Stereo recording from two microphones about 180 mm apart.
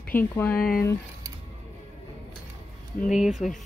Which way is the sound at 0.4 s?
10° left (ahead or behind).